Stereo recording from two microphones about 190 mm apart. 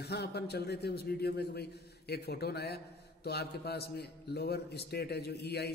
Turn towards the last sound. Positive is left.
turn(degrees=60)  # may be behind; listen again after turning